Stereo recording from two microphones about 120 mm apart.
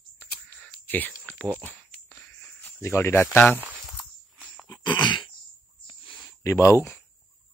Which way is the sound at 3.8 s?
Centre (ahead or behind).